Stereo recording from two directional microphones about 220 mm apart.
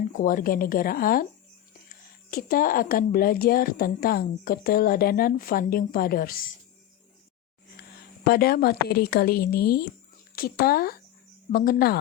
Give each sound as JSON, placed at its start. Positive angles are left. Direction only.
{"t": 0.1, "sound": "a woman's voice", "side_deg": 40}
{"t": 2.3, "sound": "a woman's voice", "side_deg": 40}
{"t": 8.3, "sound": "a woman's voice", "side_deg": 45}